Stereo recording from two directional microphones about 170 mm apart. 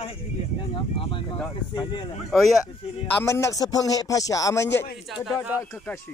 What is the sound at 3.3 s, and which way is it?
Speech, 20° left (ahead or behind).